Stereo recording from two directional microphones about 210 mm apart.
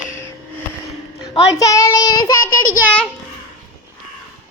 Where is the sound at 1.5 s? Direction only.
15° left (ahead or behind).